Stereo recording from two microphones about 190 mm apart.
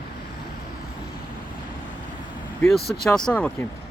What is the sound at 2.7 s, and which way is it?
Speech, 55° left (ahead or behind).